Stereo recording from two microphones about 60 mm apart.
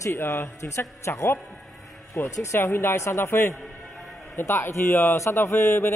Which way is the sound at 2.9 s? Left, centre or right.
Left.